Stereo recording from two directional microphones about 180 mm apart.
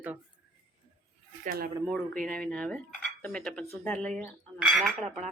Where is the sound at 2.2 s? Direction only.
5° left (ahead or behind).